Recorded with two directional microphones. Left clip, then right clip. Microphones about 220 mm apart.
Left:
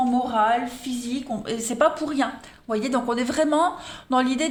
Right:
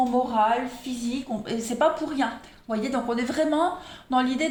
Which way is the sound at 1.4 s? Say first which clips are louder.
Left 2 dB; 40° left (ahead or behind).